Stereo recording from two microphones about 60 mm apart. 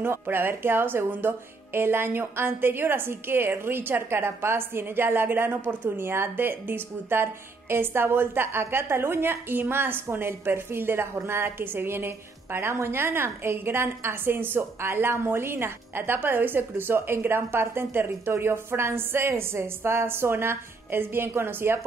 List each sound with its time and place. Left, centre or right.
0.0 s a woman's voice: right